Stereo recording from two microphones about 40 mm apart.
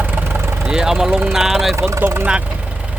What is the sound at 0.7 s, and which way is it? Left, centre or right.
Speech, centre.